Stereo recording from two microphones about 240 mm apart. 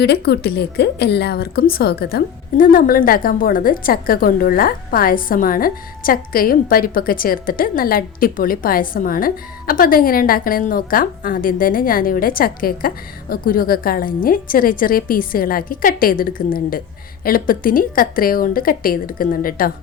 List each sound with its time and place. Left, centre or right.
0.0 s a woman's voice: left